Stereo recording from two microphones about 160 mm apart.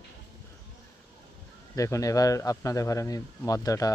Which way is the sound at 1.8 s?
20° left (ahead or behind).